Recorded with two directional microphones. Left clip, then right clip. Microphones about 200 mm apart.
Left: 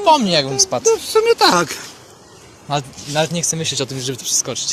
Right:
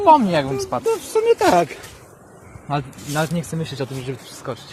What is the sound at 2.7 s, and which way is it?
Speech, 5° left (ahead or behind).